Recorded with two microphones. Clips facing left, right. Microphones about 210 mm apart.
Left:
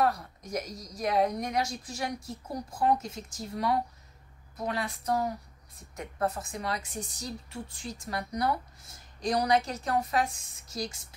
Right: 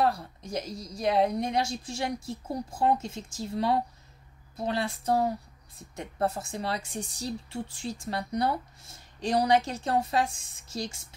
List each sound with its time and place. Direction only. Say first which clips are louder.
0.0 s speech: right 1 dB; 30° right (ahead or behind)